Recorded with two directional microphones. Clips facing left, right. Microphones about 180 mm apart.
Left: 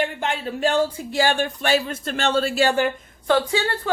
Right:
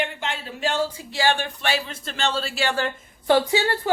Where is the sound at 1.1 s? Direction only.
45° left (ahead or behind).